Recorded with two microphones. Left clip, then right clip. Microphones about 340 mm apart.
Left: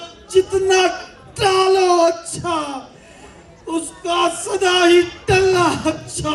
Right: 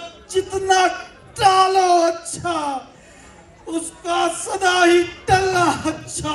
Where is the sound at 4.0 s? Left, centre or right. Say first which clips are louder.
Left 2 dB; centre.